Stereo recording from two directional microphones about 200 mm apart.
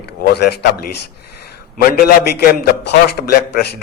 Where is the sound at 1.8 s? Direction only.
50° left (ahead or behind).